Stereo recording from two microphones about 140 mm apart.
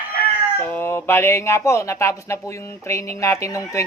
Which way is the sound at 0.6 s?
15° left (ahead or behind).